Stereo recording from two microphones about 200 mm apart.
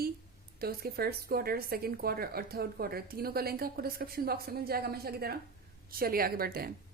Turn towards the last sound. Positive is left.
turn(degrees=-50)  # may be behind; listen again after turning